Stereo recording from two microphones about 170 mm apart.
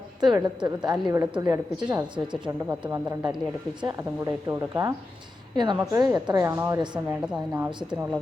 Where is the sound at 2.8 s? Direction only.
25° right (ahead or behind).